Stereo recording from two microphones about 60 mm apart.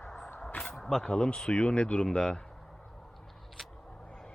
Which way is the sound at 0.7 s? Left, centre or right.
Centre.